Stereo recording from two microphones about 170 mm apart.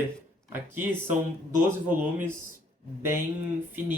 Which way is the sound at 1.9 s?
10° right (ahead or behind).